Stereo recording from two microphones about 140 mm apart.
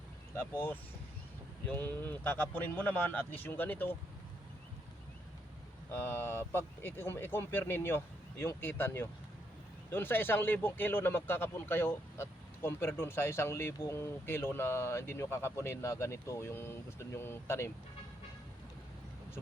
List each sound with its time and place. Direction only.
1.7 s speech: 15° left (ahead or behind)
5.9 s speech: 15° left (ahead or behind)